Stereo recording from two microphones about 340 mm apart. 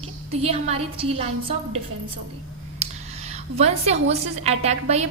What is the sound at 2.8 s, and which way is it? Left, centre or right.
A woman's voice, centre.